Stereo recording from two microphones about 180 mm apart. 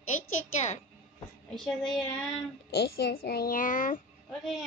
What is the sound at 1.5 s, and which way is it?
Speech, centre (ahead or behind).